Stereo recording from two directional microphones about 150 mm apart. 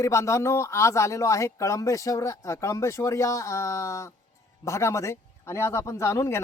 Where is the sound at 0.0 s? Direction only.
20° left (ahead or behind).